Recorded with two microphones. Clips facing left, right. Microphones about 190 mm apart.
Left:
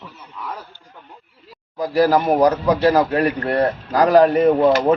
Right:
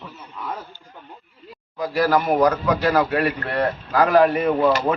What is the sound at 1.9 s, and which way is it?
A man's voice, 35° left (ahead or behind).